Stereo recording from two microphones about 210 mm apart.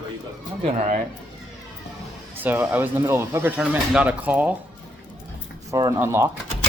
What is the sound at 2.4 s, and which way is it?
Speech, 10° right (ahead or behind).